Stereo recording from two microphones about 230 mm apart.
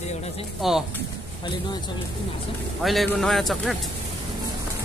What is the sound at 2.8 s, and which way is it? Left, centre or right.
Speech, centre.